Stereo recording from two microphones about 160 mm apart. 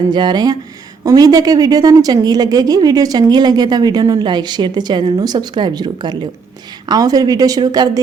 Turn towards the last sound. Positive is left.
turn(degrees=-25)  # may be behind; listen again after turning